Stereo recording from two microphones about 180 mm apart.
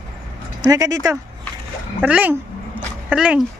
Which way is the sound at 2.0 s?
10° right (ahead or behind).